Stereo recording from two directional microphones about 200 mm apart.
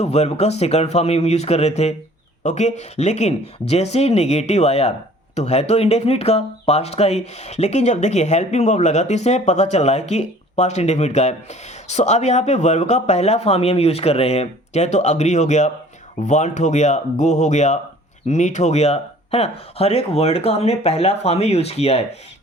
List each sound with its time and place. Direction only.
0.0 s speech: 30° left (ahead or behind)